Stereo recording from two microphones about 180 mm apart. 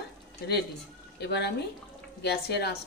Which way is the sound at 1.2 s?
70° left (ahead or behind).